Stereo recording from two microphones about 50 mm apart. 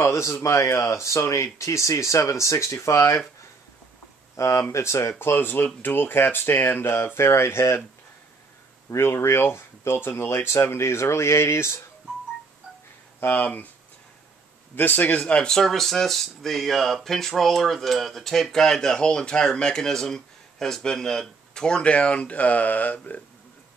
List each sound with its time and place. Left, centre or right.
0.0 s speech: left
4.4 s speech: left
5.2 s speech: left
8.9 s speech: left
13.2 s speech: left
14.8 s speech: left; by 15.6 s centre
15.6 s speech: centre; by 23.2 s left